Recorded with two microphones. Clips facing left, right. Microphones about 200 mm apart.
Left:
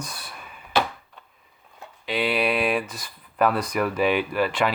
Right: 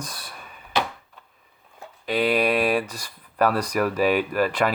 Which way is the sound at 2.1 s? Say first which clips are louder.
Right 3 dB; 40° right (ahead or behind).